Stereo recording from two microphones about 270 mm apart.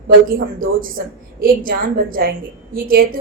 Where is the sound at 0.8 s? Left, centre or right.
Right.